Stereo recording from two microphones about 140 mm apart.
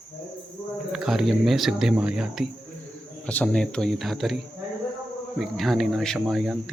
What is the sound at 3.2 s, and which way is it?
Speech, 10° left (ahead or behind).